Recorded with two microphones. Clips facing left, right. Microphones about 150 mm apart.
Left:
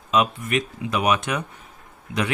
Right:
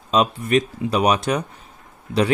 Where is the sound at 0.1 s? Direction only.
35° right (ahead or behind).